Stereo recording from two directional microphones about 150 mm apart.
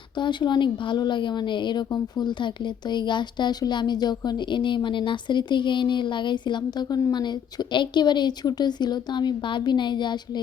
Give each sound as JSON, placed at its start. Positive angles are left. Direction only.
{"t": 0.2, "sound": "a woman's voice", "side_deg": 30}